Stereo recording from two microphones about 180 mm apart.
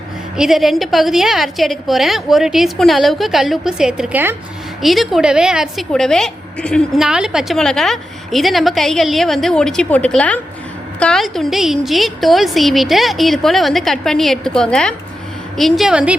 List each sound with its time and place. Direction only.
0.3 s a woman's voice: centre (ahead or behind)